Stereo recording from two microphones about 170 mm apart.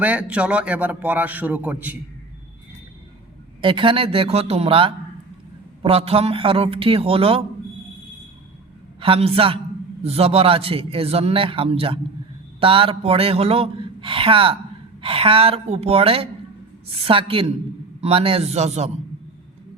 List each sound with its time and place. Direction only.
0.0 s a man's voice: 10° right (ahead or behind)
3.6 s a man's voice: 30° right (ahead or behind)
9.0 s a man's voice: 35° right (ahead or behind)